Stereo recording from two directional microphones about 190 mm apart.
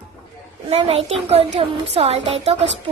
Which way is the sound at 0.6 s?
30° right (ahead or behind).